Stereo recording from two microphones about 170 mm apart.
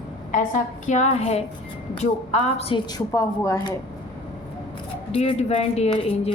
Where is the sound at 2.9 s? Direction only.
20° left (ahead or behind).